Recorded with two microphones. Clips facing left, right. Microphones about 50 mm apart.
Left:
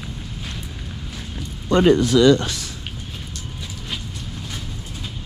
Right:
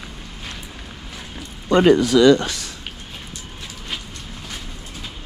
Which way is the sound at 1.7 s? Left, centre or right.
Right.